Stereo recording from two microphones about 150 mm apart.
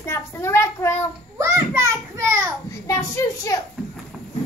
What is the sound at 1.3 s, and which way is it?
A child's voice, 20° right (ahead or behind).